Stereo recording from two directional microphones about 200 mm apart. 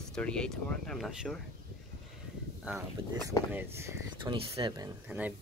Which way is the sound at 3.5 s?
10° right (ahead or behind).